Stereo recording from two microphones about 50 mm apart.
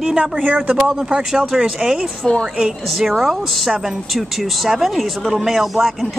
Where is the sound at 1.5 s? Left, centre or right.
Centre.